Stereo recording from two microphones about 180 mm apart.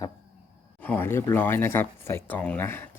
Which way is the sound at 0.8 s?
10° left (ahead or behind).